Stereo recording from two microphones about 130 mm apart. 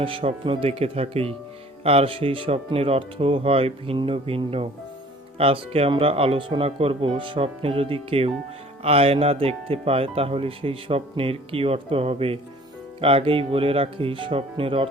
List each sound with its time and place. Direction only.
0.0 s speech: 45° right (ahead or behind)